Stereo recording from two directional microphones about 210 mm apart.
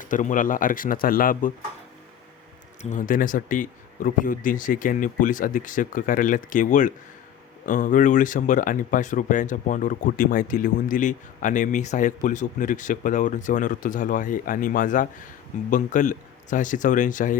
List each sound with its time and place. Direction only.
0.0 s speech: 40° left (ahead or behind)
2.8 s speech: 40° left (ahead or behind)